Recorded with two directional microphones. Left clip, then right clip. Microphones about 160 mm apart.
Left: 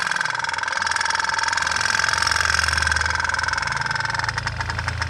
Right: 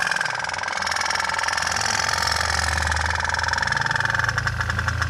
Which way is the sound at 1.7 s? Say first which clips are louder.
Left 2 dB; 25° left (ahead or behind).